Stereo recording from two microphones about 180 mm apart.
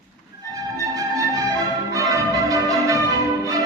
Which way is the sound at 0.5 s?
20° right (ahead or behind).